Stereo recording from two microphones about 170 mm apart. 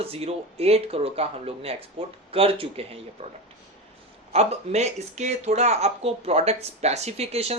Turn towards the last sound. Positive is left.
turn(degrees=-35)  # may be behind; listen again after turning